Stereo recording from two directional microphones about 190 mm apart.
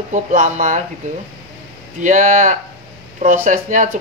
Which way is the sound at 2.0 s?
40° right (ahead or behind).